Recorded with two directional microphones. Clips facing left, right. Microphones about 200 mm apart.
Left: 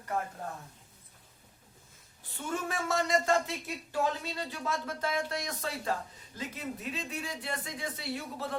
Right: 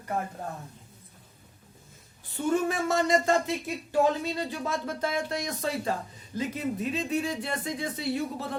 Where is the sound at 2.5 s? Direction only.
15° right (ahead or behind).